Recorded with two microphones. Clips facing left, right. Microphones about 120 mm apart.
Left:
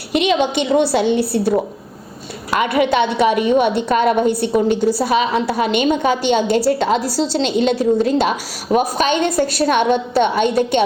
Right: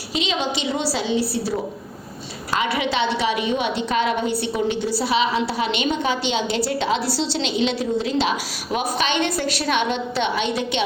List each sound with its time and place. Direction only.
0.1 s a woman's voice: 60° left (ahead or behind)